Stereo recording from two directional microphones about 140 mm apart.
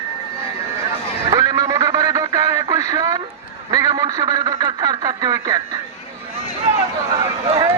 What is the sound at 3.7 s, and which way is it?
A man's voice, 25° right (ahead or behind).